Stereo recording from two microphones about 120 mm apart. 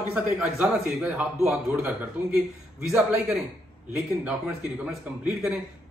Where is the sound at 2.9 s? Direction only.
5° right (ahead or behind).